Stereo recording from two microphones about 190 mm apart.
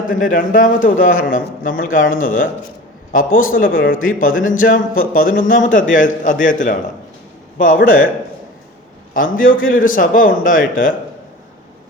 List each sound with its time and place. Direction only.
0.1 s a man's voice: 45° left (ahead or behind)
9.1 s a man's voice: 45° left (ahead or behind)